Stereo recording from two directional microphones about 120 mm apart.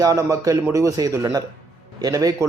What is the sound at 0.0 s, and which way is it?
A man's voice, 25° right (ahead or behind).